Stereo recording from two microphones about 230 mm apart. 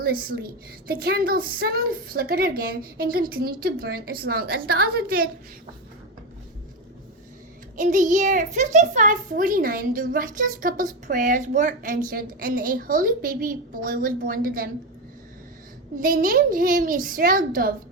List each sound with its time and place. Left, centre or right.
0.0 s a child's voice: right
7.8 s a child's voice: right
16.0 s a child's voice: right